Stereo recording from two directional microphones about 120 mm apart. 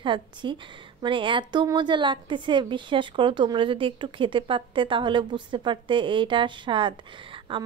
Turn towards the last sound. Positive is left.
turn(degrees=-45)  # may be behind; listen again after turning